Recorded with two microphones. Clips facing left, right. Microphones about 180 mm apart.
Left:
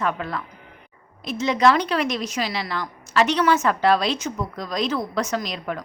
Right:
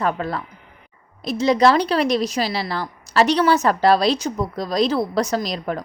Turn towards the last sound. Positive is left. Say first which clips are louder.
# right 4 dB
turn(degrees=-35)  # may be behind; listen again after turning